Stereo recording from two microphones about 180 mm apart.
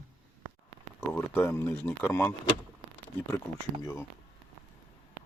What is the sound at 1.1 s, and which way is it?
Speech, 10° left (ahead or behind).